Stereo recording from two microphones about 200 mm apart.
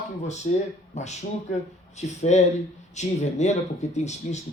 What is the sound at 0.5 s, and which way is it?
Speech, 40° left (ahead or behind).